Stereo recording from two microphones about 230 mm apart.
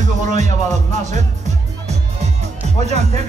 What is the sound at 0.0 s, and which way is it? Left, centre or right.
Music, right.